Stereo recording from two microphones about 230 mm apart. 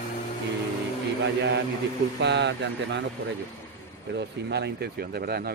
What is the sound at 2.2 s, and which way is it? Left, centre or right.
Speech, right.